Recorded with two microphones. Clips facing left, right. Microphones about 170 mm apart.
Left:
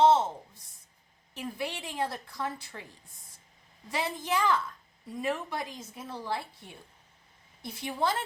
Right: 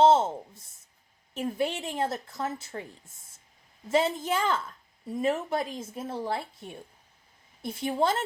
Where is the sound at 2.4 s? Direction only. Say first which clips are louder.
Right 2 dB; 45° right (ahead or behind).